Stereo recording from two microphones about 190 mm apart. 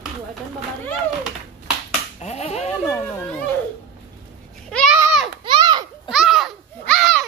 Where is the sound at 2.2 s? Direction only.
35° left (ahead or behind).